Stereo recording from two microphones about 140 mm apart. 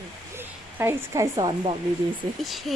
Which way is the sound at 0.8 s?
20° right (ahead or behind).